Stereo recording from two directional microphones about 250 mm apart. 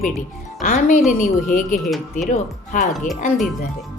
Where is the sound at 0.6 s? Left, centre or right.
Left.